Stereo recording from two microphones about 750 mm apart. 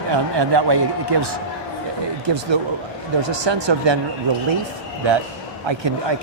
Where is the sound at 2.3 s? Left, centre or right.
Right.